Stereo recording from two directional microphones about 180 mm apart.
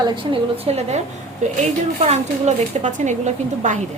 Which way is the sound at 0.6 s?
35° right (ahead or behind).